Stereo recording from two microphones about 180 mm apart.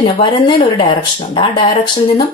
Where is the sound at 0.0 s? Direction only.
25° left (ahead or behind).